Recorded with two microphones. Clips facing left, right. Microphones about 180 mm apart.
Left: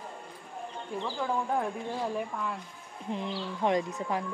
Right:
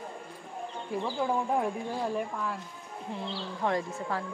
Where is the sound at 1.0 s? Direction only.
10° right (ahead or behind).